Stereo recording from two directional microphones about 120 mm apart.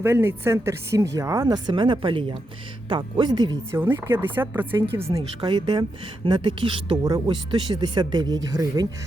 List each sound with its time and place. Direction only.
0.0 s speech: 20° right (ahead or behind); by 3.6 s 35° right (ahead or behind)
3.7 s speech: 20° right (ahead or behind)
5.1 s speech: 35° right (ahead or behind)
7.0 s speech: 35° right (ahead or behind)